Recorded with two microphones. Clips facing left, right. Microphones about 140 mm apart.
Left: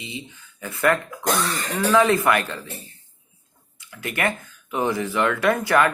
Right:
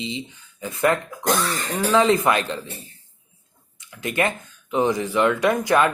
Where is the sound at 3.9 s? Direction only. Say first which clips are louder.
Right 2 dB; 20° right (ahead or behind).